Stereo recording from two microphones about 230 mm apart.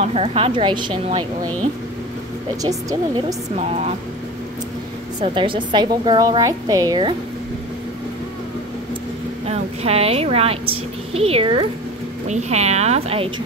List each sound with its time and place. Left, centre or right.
0.0 s a woman's voice: right
2.6 s speech: centre
3.5 s a woman's voice: right
5.2 s a woman's voice: right
9.5 s a woman's voice: right